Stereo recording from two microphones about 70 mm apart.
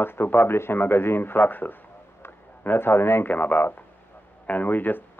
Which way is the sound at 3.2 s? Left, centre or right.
Left.